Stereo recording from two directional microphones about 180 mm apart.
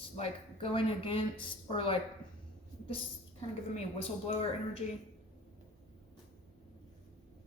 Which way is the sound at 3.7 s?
35° left (ahead or behind).